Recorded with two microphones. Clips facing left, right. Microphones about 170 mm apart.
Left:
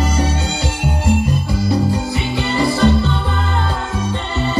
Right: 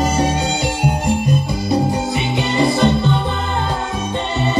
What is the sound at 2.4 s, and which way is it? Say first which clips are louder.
Music: right 1 dB; 20° right (ahead or behind).